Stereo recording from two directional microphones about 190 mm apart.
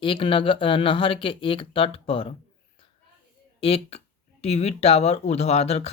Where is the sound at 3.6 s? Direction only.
30° left (ahead or behind).